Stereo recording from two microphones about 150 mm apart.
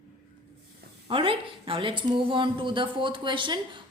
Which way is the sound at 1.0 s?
35° right (ahead or behind).